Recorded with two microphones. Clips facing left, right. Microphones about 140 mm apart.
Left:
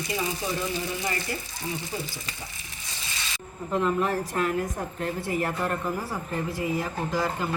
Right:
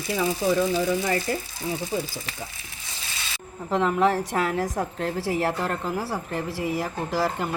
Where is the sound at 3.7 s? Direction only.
90° right.